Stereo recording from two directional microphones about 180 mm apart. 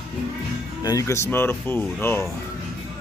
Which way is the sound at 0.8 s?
20° left (ahead or behind).